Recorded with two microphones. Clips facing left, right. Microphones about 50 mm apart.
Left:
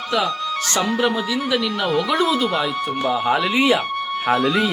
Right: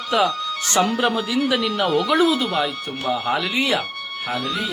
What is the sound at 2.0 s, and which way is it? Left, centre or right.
Speech, centre.